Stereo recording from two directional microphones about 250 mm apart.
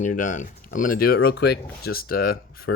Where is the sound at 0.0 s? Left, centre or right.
Left.